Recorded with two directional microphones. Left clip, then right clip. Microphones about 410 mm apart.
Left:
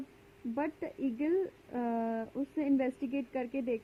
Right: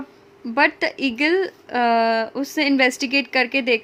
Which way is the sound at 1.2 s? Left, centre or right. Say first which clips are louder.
Right 13 dB; centre.